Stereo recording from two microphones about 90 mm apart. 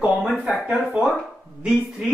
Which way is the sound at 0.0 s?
5° right (ahead or behind).